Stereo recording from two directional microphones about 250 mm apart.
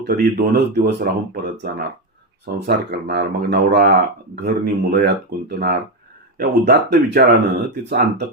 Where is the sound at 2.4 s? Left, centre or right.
Right.